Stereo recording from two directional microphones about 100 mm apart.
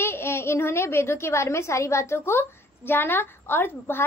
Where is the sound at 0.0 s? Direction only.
25° left (ahead or behind).